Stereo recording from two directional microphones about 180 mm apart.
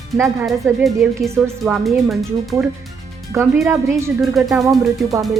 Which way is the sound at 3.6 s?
15° right (ahead or behind).